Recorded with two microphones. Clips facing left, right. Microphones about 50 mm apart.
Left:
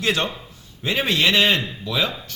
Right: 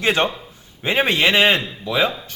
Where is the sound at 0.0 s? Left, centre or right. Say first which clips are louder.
Right 4 dB; right.